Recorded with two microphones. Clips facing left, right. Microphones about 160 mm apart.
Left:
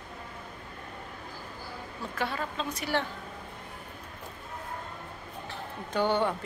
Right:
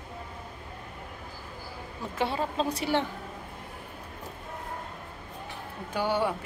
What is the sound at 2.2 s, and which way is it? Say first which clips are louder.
Speech: right 5 dB; 25° right (ahead or behind).